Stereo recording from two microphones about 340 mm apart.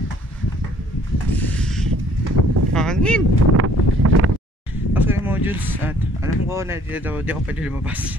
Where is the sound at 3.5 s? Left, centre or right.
Right.